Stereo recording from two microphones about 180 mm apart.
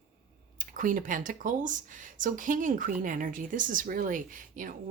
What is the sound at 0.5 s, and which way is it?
Speech, 50° right (ahead or behind).